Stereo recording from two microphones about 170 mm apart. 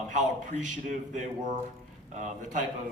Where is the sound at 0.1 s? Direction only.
45° right (ahead or behind).